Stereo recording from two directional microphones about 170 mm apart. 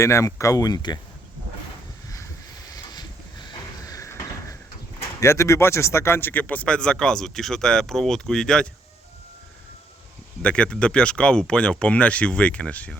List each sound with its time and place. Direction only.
0.0 s speech: 15° left (ahead or behind)
3.8 s a sound: 20° left (ahead or behind)
5.2 s speech: 15° left (ahead or behind)
10.4 s speech: 5° left (ahead or behind)